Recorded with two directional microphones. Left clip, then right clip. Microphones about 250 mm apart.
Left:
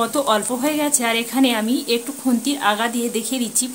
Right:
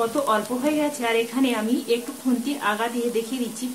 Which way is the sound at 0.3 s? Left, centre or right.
Left.